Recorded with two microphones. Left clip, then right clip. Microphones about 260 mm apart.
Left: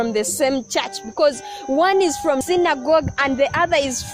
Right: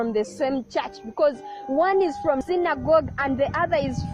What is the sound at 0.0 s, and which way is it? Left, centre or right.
Speech, left.